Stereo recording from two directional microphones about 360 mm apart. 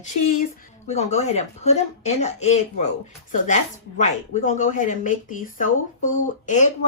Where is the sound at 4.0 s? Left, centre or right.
Centre.